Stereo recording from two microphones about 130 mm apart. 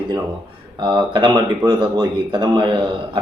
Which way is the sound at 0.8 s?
35° right (ahead or behind).